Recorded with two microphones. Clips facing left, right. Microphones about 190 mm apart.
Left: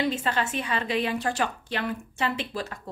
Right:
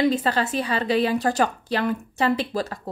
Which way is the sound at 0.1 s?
35° right (ahead or behind).